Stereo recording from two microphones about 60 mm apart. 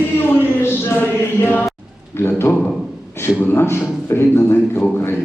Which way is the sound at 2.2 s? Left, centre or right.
Left.